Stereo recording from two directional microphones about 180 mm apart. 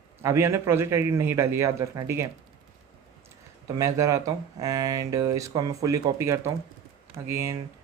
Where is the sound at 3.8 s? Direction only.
20° right (ahead or behind).